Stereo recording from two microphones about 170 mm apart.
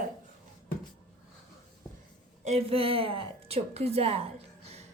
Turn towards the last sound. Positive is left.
turn(degrees=-35)  # may be behind; listen again after turning